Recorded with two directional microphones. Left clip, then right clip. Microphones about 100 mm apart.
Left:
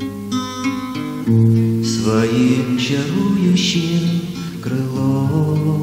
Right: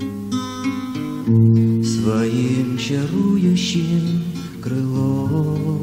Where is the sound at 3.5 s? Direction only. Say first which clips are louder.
Left 4 dB; 35° left (ahead or behind).